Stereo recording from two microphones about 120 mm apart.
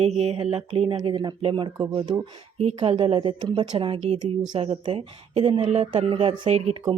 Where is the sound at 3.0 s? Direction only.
45° right (ahead or behind).